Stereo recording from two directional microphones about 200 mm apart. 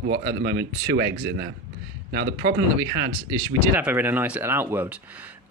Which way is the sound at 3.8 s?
10° right (ahead or behind).